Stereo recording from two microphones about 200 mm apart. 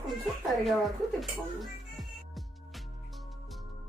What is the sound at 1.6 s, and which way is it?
Music, centre (ahead or behind).